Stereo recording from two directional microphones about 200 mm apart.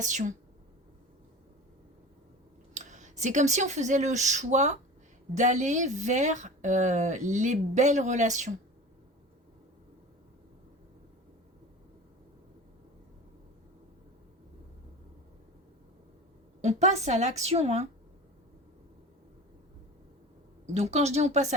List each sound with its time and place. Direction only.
0.0 s speech: 35° right (ahead or behind)
2.7 s speech: 35° right (ahead or behind)
16.6 s speech: 35° right (ahead or behind)
20.7 s speech: 35° right (ahead or behind)